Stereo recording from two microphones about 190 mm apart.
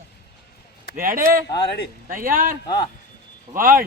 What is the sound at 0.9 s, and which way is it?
Speech, 50° right (ahead or behind).